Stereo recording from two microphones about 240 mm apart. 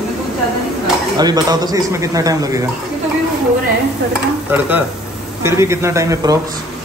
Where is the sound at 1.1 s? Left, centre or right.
Centre.